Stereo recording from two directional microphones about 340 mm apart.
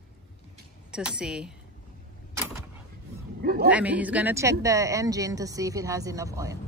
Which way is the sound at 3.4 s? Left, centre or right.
Right.